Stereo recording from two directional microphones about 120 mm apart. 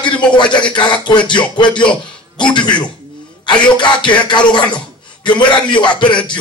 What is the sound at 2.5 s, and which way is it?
Speech, 40° left (ahead or behind).